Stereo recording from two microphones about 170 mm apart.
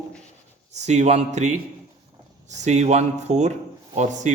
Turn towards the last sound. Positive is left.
turn(degrees=-45)  # may be behind; listen again after turning